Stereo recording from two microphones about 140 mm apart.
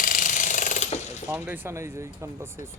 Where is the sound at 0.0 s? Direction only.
70° left (ahead or behind); by 1.0 s 55° left (ahead or behind).